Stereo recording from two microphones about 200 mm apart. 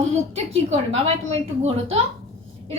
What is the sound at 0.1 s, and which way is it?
Speech, 35° right (ahead or behind).